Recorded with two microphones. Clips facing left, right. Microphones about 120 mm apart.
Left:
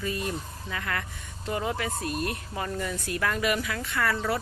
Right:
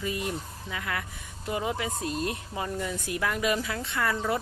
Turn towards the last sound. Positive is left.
turn(degrees=-20)  # may be behind; listen again after turning